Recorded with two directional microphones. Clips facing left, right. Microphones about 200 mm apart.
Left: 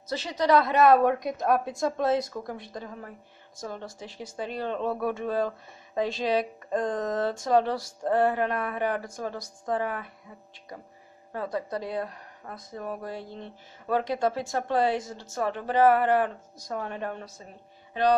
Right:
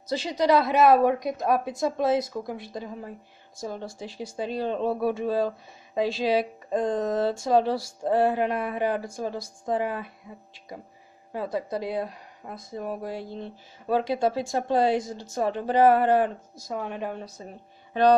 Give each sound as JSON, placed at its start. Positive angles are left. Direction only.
{"t": 0.0, "sound": "a woman's voice", "side_deg": -10}
{"t": 11.3, "sound": "speech", "side_deg": -5}
{"t": 16.5, "sound": "speech", "side_deg": -5}